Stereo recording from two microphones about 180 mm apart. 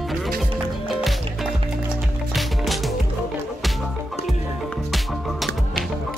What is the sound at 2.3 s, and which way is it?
Music, centre (ahead or behind).